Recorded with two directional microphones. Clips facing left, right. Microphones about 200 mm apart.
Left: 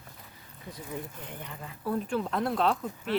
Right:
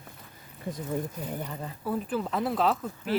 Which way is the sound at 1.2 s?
40° right (ahead or behind).